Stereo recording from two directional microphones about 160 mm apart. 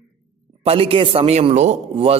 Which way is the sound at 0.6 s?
35° right (ahead or behind).